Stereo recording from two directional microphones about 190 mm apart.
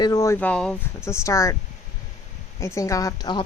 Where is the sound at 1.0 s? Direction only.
15° left (ahead or behind).